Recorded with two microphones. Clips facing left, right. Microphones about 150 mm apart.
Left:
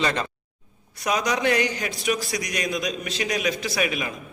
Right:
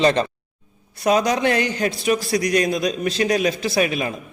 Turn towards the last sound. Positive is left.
turn(degrees=-35)  # may be behind; listen again after turning